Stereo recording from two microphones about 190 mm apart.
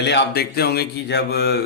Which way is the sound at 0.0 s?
65° left (ahead or behind).